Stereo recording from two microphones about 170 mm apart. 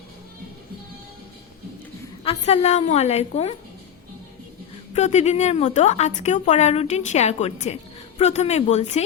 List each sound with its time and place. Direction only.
2.2 s a woman's voice: 40° left (ahead or behind)
4.9 s a woman's voice: 40° left (ahead or behind)